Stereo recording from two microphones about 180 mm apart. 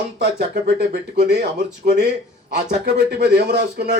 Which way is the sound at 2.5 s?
60° right (ahead or behind).